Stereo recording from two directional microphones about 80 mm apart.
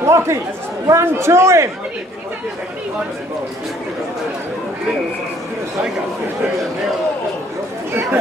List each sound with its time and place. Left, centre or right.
0.0 s chatter: right
0.8 s a man's voice: right